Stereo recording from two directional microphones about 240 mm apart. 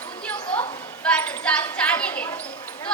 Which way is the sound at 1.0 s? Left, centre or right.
Centre.